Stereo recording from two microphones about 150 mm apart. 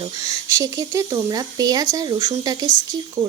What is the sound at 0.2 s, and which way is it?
Speech, 20° right (ahead or behind).